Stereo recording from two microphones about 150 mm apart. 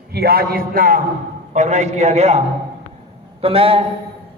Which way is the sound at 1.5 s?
50° right (ahead or behind).